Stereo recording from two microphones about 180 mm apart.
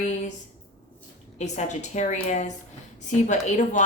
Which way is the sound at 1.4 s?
40° left (ahead or behind).